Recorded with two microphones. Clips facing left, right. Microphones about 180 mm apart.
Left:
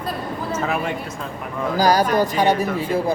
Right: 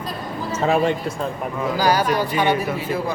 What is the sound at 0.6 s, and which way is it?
Speech, 30° right (ahead or behind).